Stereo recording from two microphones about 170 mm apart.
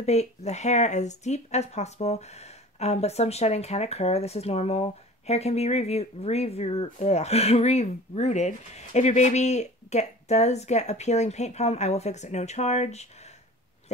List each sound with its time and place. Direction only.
0.0 s speech: 40° left (ahead or behind)